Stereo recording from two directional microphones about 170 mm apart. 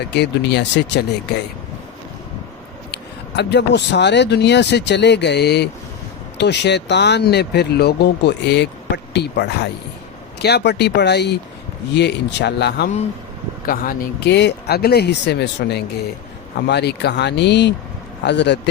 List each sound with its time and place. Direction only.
0.0 s speech: 80° left
2.9 s speech: 90° left
6.3 s speech: 90° left
13.7 s speech: 60° left (ahead or behind); by 18.7 s 90° left